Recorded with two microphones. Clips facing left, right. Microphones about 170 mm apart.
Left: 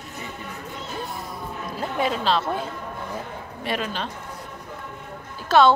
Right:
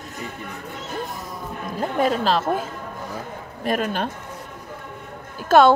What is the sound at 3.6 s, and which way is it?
Speech, 50° right (ahead or behind).